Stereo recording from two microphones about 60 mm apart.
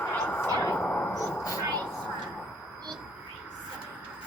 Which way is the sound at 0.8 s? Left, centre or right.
Left.